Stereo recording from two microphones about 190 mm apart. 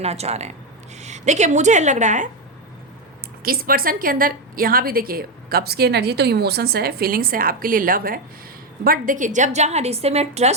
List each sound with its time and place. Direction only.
0.0 s a woman's voice: 35° right (ahead or behind)
3.4 s a woman's voice: 50° right (ahead or behind); by 10.5 s 35° right (ahead or behind)